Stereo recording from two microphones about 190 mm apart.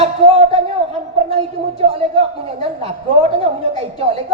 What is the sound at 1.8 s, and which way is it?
Speech, 30° right (ahead or behind).